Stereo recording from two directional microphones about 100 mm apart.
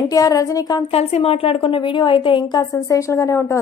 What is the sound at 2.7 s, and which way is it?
Speech, 30° left (ahead or behind).